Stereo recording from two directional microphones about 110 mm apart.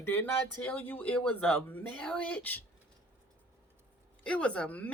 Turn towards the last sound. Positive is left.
turn(degrees=10)  # may be behind; listen again after turning